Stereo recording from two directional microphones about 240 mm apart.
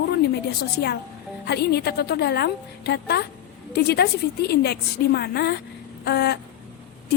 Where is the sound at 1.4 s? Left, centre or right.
Left.